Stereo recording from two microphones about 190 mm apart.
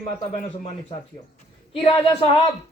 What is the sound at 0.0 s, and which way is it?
Speech, 30° left (ahead or behind).